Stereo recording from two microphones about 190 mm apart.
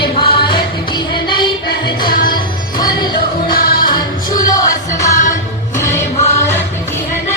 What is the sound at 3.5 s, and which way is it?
Music, 50° left (ahead or behind).